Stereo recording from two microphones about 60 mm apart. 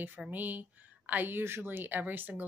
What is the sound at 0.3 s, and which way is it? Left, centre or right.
A woman's voice, right.